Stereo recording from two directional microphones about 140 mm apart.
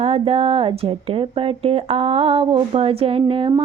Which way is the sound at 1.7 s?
45° right (ahead or behind).